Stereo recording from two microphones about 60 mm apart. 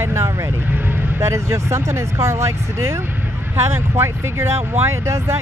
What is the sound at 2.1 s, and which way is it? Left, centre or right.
Speech, right.